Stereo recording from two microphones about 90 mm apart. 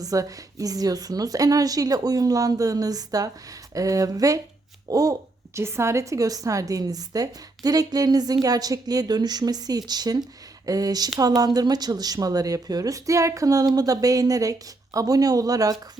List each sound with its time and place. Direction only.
0.0 s a woman's voice: 40° right (ahead or behind)
5.5 s a woman's voice: 30° right (ahead or behind)